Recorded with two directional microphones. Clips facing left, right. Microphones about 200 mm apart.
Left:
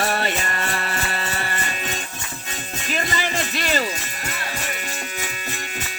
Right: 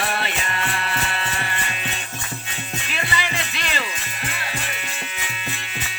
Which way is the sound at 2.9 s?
40° left (ahead or behind).